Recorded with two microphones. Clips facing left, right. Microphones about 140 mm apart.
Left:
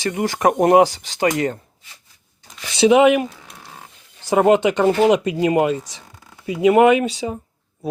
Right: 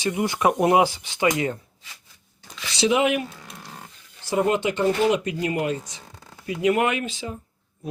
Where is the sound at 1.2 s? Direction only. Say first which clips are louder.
Left 3 dB; 40° left (ahead or behind).